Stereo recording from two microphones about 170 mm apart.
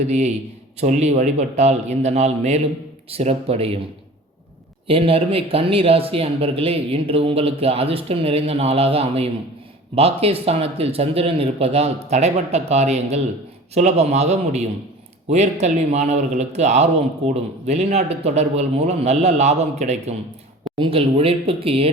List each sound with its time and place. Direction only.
0.1 s a man's voice: 40° right (ahead or behind)
4.9 s a man's voice: 35° right (ahead or behind)